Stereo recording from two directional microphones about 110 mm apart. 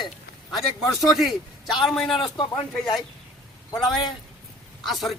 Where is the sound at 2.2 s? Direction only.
50° left (ahead or behind).